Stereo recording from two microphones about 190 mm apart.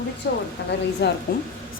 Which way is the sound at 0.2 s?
65° left (ahead or behind).